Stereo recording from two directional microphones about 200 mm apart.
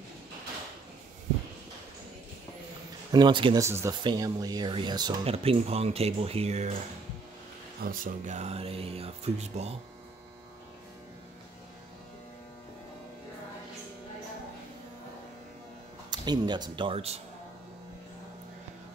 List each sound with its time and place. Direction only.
3.1 s speech: 20° right (ahead or behind)
7.8 s speech: 45° right (ahead or behind)
16.1 s speech: 20° right (ahead or behind)